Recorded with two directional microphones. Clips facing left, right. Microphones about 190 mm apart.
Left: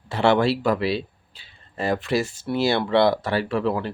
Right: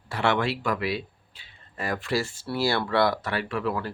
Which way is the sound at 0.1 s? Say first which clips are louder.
Left 6 dB; 30° left (ahead or behind).